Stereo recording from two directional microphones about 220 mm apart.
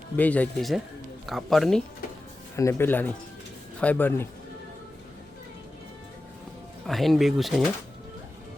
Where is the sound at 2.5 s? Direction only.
10° left (ahead or behind).